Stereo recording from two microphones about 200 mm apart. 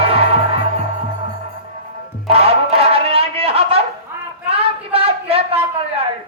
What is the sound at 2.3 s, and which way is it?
Music, 30° right (ahead or behind).